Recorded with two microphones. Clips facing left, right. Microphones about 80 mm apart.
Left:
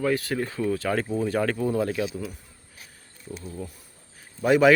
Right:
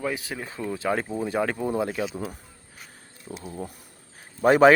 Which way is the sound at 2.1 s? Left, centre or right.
Right.